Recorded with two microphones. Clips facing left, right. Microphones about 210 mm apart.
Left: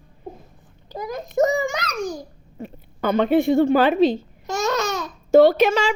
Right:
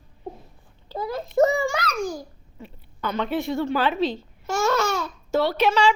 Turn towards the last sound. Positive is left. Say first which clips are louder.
# left 4 dB
turn(degrees=45)  # may be behind; listen again after turning